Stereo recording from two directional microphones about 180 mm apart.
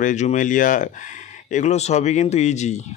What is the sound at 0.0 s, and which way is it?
Speech, 40° left (ahead or behind).